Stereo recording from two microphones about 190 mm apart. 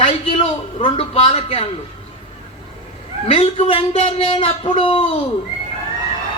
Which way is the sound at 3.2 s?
30° left (ahead or behind).